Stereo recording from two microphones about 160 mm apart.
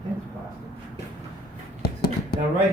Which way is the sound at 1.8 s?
70° left (ahead or behind).